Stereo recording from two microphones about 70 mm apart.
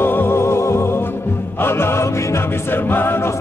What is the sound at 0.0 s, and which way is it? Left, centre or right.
Music, left.